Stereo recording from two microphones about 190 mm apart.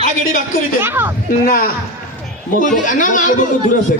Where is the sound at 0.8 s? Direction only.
10° right (ahead or behind).